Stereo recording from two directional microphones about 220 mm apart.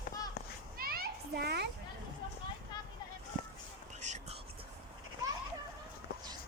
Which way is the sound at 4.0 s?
35° right (ahead or behind).